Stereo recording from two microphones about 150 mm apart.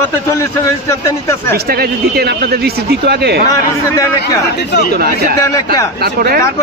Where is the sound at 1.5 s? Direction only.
90° right.